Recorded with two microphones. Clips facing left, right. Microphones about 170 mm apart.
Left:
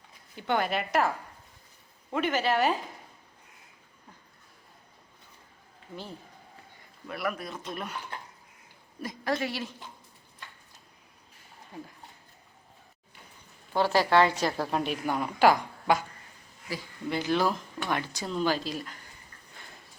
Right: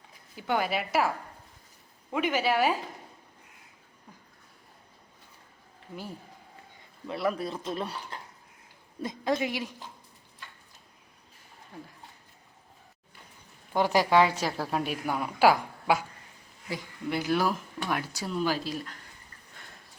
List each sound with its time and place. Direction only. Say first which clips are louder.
0.3 s a woman's voice: even; 5° right (ahead or behind)
7.1 s speech: right 4 dB; 25° right (ahead or behind)
9.0 s a woman's voice: right 2 dB; 20° right (ahead or behind)
13.7 s a woman's voice: even; 15° right (ahead or behind)
17.1 s a woman's voice: even; 10° right (ahead or behind)
19.5 s a sound: left 1 dB; centre (ahead or behind)